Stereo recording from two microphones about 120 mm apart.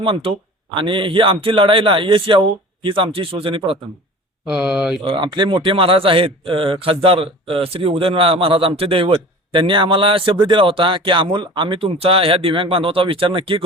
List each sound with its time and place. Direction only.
0.0 s speech: 45° right (ahead or behind)
4.4 s speech: 5° right (ahead or behind)
5.0 s speech: 40° right (ahead or behind)